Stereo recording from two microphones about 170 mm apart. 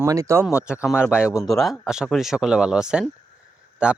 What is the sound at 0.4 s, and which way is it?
A man's voice, 5° right (ahead or behind).